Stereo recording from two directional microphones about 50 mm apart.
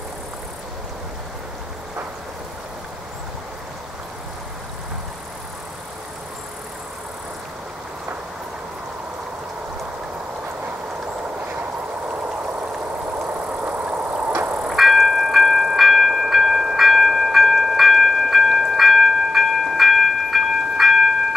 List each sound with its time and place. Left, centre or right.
13.3 s vehicle: right
14.3 s music: right
14.7 s train: centre